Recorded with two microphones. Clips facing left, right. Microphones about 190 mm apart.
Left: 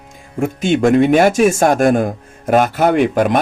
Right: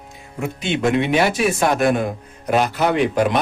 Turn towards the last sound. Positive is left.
turn(degrees=50)  # may be behind; listen again after turning